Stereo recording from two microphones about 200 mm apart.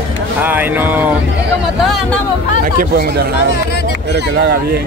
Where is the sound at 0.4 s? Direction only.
10° right (ahead or behind).